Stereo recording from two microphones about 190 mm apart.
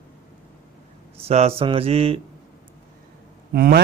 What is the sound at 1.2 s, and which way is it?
Speech, 35° right (ahead or behind).